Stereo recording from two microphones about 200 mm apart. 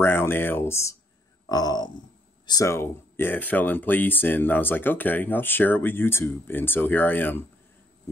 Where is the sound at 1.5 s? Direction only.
20° left (ahead or behind).